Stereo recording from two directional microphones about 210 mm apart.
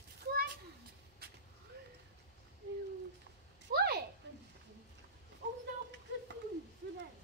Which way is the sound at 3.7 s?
50° right (ahead or behind).